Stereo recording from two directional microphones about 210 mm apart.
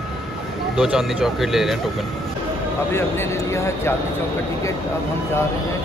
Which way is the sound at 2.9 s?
10° left (ahead or behind).